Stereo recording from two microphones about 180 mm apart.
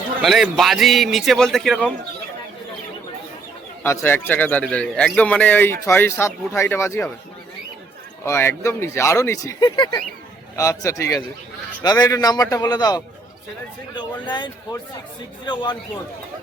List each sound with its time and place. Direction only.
0.2 s a man's voice: centre (ahead or behind)
3.8 s a man's voice: 15° left (ahead or behind)
8.2 s a man's voice: 15° left (ahead or behind)